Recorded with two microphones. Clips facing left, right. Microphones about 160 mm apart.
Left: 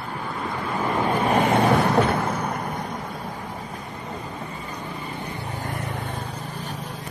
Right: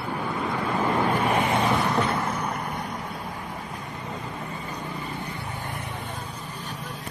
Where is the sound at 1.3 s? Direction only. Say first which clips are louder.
Left 4 dB; 55° left (ahead or behind).